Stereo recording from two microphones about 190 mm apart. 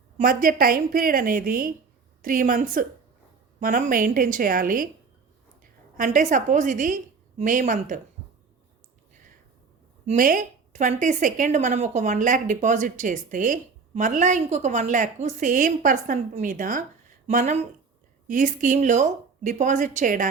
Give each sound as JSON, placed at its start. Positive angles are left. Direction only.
{"t": 0.2, "sound": "a woman's voice", "side_deg": -45}
{"t": 6.0, "sound": "a woman's voice", "side_deg": -40}
{"t": 10.1, "sound": "speech", "side_deg": -45}